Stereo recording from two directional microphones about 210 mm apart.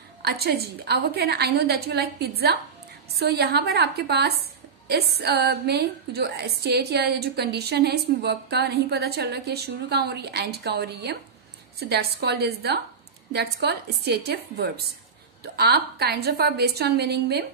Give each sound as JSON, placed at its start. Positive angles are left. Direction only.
{"t": 0.2, "sound": "a woman's voice", "side_deg": -50}